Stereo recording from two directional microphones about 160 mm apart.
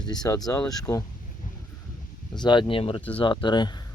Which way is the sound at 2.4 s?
30° left (ahead or behind).